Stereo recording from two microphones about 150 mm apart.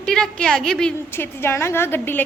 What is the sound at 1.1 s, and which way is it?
A woman's voice, 15° left (ahead or behind).